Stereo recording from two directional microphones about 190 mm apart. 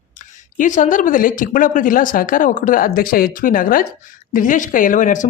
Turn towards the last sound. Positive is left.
turn(degrees=45)  # may be behind; listen again after turning